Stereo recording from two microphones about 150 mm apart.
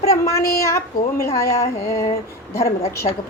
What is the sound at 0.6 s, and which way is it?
Speech, 20° left (ahead or behind).